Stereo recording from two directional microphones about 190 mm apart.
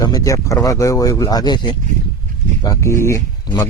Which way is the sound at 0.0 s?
20° left (ahead or behind).